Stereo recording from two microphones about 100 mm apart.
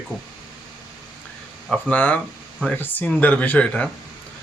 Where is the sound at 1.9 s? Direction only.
15° left (ahead or behind).